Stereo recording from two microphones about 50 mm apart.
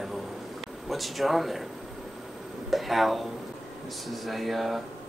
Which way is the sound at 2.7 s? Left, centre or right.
Centre.